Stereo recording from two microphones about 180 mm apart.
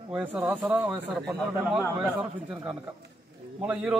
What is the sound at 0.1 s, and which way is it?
Speech, 10° right (ahead or behind).